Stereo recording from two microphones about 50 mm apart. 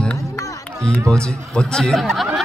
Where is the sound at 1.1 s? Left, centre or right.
Centre.